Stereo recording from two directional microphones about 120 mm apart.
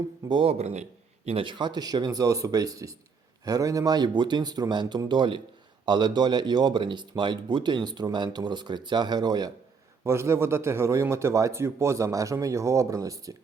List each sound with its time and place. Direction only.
0.3 s speech: 40° right (ahead or behind)
0.6 s speech: 65° right (ahead or behind); by 9.5 s 35° right (ahead or behind)
10.0 s a man's voice: 20° right (ahead or behind)